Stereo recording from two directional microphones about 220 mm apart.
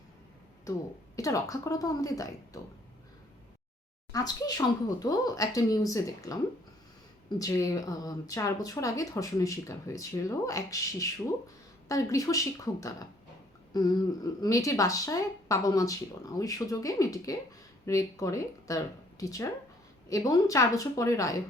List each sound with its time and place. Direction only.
0.7 s speech: 15° left (ahead or behind)
4.1 s speech: 15° left (ahead or behind)